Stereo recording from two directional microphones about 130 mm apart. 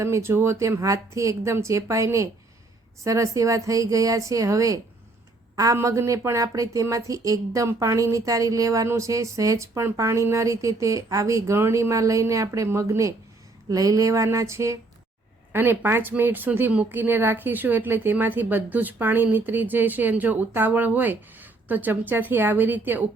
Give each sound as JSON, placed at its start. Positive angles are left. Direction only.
{"t": 0.0, "sound": "a woman's voice", "side_deg": -20}